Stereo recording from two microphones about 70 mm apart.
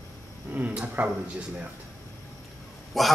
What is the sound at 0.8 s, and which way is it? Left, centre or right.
Speech, right.